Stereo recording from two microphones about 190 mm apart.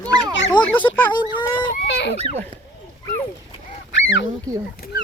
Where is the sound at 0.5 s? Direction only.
25° left (ahead or behind).